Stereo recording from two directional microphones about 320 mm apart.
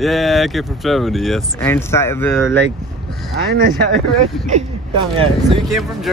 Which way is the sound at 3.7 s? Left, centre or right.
Right.